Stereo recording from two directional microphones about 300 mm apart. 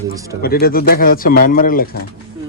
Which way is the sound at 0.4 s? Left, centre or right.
Left.